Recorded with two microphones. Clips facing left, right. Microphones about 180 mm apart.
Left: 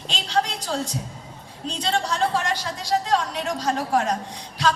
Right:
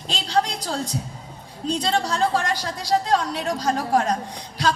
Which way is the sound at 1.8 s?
40° right (ahead or behind).